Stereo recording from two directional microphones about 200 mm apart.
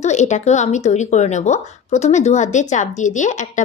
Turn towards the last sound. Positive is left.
turn(degrees=40)  # may be behind; listen again after turning